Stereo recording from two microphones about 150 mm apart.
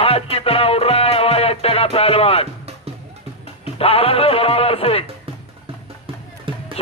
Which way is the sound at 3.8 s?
40° left (ahead or behind).